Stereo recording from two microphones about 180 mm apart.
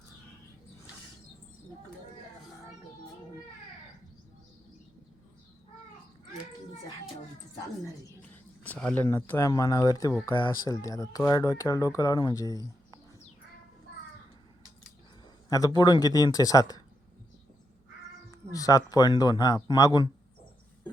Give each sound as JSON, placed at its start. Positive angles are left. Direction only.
{"t": 8.6, "sound": "speech", "side_deg": 5}
{"t": 15.4, "sound": "a man's voice", "side_deg": 20}
{"t": 18.3, "sound": "speech", "side_deg": 20}